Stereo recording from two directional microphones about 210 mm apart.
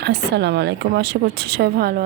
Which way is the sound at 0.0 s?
55° right (ahead or behind).